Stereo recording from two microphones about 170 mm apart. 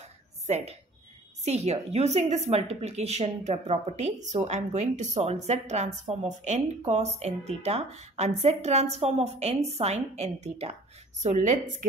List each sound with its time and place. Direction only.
1.4 s a woman's voice: 40° right (ahead or behind)